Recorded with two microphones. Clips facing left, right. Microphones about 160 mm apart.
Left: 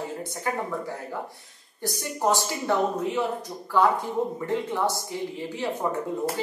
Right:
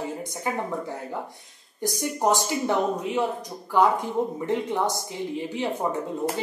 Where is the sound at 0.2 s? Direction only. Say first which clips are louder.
Even; 15° right (ahead or behind).